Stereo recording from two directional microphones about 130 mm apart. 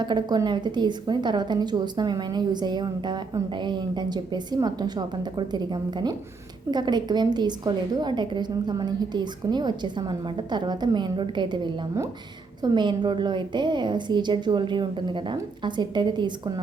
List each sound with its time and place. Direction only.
0.0 s a woman's voice: 35° right (ahead or behind)